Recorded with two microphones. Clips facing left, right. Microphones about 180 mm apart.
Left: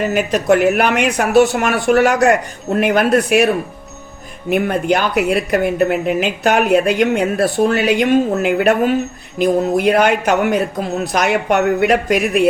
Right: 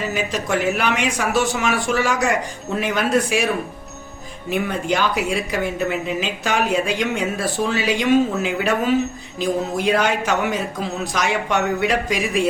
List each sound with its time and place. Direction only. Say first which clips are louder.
0.0 s a woman's voice: left 7 dB; 60° left (ahead or behind)